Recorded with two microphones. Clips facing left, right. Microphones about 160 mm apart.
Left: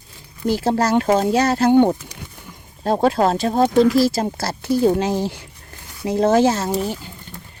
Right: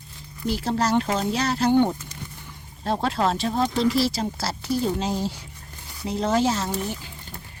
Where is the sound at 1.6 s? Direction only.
55° left (ahead or behind).